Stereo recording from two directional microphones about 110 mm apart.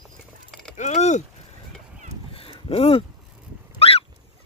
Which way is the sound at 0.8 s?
90° left.